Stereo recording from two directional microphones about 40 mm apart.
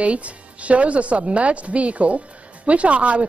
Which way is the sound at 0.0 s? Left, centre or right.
Right.